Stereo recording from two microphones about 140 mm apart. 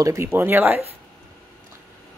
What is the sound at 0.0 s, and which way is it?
Speech, 20° right (ahead or behind).